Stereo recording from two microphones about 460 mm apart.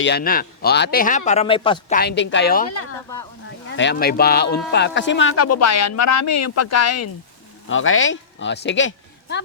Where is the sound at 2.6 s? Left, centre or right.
Left.